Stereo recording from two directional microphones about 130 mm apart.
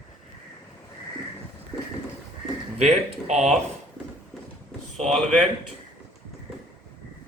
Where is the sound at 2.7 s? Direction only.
60° right (ahead or behind).